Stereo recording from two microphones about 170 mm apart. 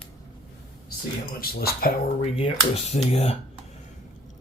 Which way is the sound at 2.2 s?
35° left (ahead or behind).